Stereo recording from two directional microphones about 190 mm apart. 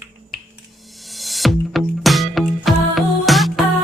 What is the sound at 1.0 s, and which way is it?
Music, centre (ahead or behind).